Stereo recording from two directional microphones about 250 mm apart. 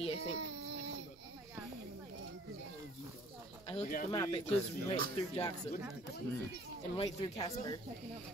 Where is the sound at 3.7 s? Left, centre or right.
Left.